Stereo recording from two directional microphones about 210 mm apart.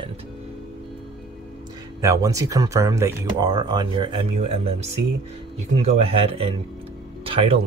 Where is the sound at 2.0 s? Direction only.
15° right (ahead or behind).